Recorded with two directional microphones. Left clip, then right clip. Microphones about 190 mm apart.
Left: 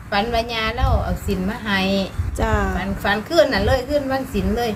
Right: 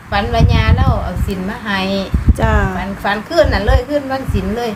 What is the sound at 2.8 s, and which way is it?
A woman's voice, 10° left (ahead or behind).